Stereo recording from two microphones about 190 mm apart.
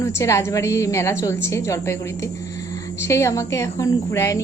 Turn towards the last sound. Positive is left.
turn(degrees=15)  # may be behind; listen again after turning